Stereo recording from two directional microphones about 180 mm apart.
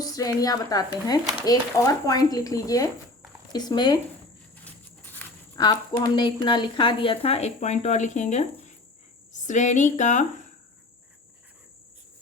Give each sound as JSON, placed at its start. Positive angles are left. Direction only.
{"t": 0.0, "sound": "a woman's voice", "side_deg": 20}
{"t": 5.5, "sound": "a woman's voice", "side_deg": 25}